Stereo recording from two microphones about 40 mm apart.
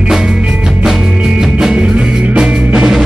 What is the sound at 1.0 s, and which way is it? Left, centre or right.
Music, right.